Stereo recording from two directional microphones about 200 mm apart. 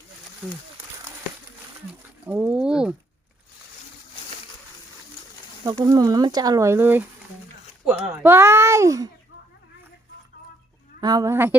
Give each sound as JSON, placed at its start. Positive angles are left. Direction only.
{"t": 2.2, "sound": "speech", "side_deg": -5}
{"t": 5.6, "sound": "speech", "side_deg": -20}
{"t": 11.0, "sound": "speech", "side_deg": -20}